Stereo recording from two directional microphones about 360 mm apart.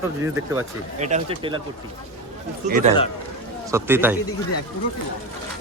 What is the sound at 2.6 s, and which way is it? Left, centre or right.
Speech, right.